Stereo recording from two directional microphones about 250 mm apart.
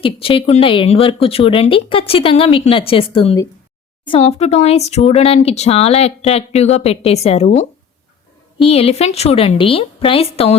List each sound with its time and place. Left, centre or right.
0.0 s speech: left